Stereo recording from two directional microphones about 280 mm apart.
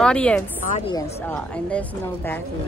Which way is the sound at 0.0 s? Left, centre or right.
Centre.